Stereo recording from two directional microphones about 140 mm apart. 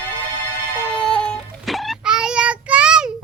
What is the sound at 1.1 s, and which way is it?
Child singing, 5° left (ahead or behind).